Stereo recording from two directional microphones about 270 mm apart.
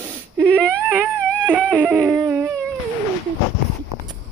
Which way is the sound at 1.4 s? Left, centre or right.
Centre.